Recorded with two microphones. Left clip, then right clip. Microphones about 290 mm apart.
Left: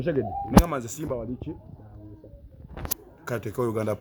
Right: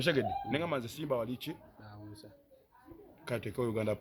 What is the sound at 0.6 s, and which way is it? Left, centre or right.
Speech, centre.